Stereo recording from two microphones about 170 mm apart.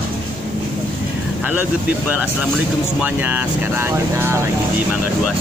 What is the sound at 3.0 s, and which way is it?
Speech, 10° right (ahead or behind).